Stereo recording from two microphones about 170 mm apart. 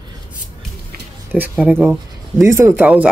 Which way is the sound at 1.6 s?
10° right (ahead or behind).